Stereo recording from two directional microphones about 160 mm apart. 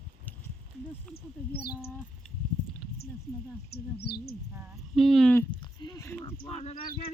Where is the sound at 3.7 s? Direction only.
85° left.